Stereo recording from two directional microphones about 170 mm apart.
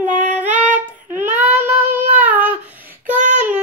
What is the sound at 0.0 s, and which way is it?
Female singing, 45° right (ahead or behind).